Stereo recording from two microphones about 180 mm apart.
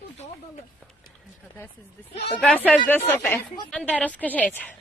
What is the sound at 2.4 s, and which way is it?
A woman's voice, 5° left (ahead or behind).